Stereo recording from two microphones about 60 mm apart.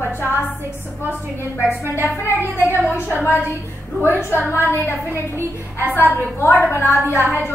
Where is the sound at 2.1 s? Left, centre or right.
Left.